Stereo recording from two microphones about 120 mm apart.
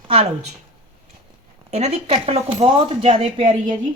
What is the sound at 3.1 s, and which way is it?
Speech, 90° right.